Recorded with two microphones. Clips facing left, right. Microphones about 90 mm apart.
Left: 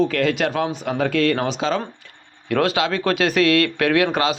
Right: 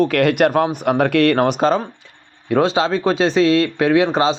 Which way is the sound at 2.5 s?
25° right (ahead or behind).